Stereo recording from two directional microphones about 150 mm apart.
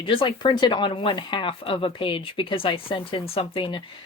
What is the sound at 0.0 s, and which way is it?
Speech, 35° left (ahead or behind).